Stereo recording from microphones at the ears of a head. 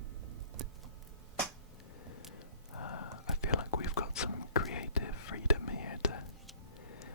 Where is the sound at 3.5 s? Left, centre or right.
Left.